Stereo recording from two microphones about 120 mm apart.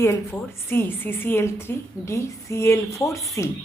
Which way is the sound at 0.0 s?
20° left (ahead or behind).